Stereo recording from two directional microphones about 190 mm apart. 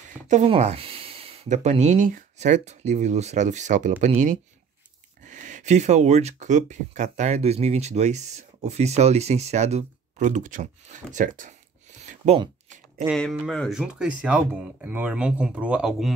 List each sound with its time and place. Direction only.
0.3 s speech: 35° right (ahead or behind)
12.6 s a sound: 40° right (ahead or behind)
13.1 s speech: centre (ahead or behind)